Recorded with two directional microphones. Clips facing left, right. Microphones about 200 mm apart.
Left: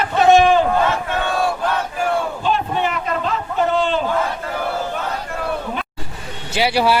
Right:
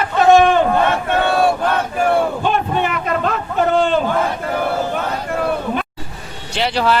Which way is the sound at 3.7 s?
50° right (ahead or behind).